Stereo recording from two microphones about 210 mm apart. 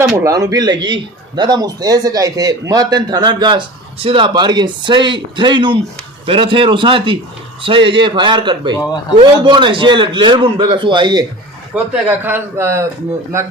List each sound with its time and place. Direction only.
0.0 s a man's voice: 15° right (ahead or behind)
8.7 s a man's voice: 15° left (ahead or behind)
9.1 s a man's voice: 20° right (ahead or behind)